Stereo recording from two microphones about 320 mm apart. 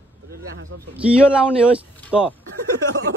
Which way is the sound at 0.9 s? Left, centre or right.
Centre.